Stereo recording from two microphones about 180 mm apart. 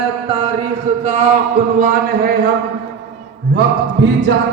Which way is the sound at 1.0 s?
40° right (ahead or behind).